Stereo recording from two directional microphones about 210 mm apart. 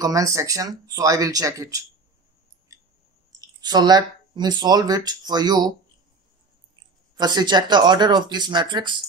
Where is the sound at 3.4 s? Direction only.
20° right (ahead or behind).